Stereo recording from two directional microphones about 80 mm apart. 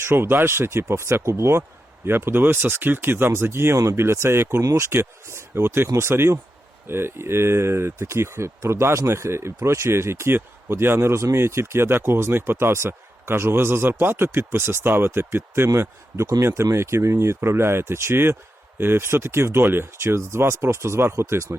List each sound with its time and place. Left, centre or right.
0.0 s speech: right
4.6 s speech: right
4.9 s speech: right